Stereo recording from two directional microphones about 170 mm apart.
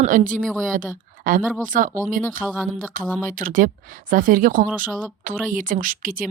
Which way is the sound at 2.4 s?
5° right (ahead or behind).